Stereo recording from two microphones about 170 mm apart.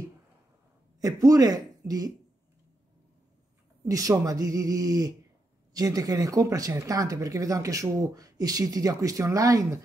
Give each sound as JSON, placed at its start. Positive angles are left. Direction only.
{"t": 1.0, "sound": "speech", "side_deg": -20}
{"t": 3.8, "sound": "speech", "side_deg": -20}